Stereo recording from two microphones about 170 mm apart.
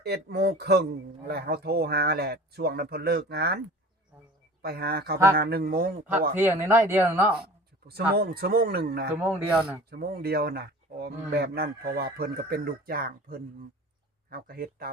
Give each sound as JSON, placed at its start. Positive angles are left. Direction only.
{"t": 0.0, "sound": "a man's voice", "side_deg": -75}
{"t": 4.6, "sound": "speech", "side_deg": -65}
{"t": 6.3, "sound": "speech", "side_deg": -10}
{"t": 7.9, "sound": "a man's voice", "side_deg": -70}
{"t": 9.2, "sound": "speech", "side_deg": -10}
{"t": 9.9, "sound": "speech", "side_deg": -70}